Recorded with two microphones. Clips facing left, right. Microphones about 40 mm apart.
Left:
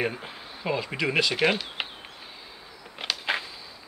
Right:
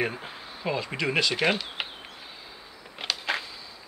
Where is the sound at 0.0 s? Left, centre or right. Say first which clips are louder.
Even; centre.